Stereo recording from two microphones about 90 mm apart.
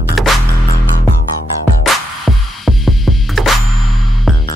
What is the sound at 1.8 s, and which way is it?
Music, centre (ahead or behind).